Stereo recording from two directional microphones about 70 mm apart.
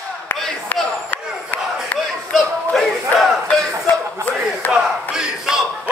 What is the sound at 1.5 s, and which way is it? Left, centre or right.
Chop, left.